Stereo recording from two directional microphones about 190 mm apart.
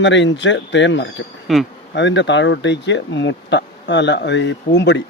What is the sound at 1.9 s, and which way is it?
Speech, 70° left (ahead or behind).